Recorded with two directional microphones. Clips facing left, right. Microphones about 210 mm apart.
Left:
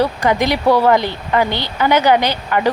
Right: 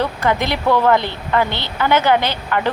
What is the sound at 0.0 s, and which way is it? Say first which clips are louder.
Speech: left 3 dB; 15° left (ahead or behind).